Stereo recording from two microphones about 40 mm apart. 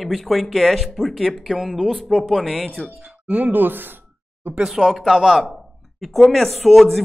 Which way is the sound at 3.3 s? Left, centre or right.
Right.